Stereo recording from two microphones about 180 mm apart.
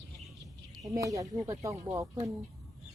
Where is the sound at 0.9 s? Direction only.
20° right (ahead or behind).